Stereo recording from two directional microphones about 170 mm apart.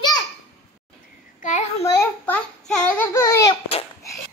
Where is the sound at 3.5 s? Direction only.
35° left (ahead or behind).